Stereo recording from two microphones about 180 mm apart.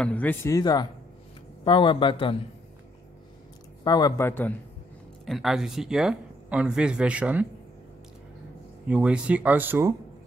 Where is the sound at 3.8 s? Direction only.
20° left (ahead or behind).